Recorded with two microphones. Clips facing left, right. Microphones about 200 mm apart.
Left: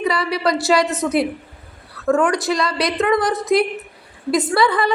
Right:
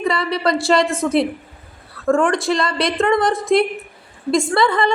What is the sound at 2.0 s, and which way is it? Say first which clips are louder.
Speech: right 1 dB; 5° left (ahead or behind).